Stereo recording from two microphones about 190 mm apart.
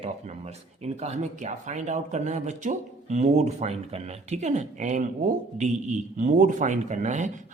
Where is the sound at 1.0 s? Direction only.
40° right (ahead or behind).